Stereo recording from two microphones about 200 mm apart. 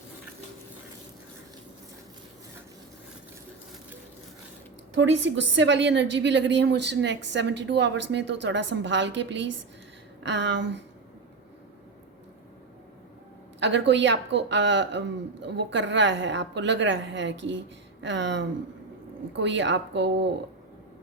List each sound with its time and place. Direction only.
4.9 s a woman's voice: 65° right (ahead or behind)
13.6 s a woman's voice: 65° right (ahead or behind)